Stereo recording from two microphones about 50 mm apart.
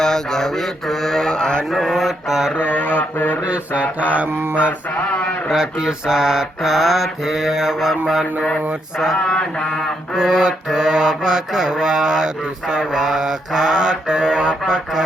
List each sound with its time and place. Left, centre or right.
0.0 s mantra: centre
1.7 s mantra: centre
2.6 s mantra: left
3.4 s mantra: right
5.5 s mantra: centre
9.1 s mantra: centre
10.2 s mantra: centre